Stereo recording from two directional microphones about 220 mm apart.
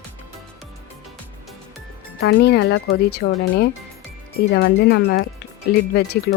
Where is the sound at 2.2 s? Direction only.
55° left (ahead or behind).